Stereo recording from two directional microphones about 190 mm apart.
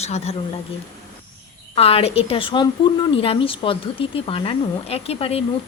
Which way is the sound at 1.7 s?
30° left (ahead or behind).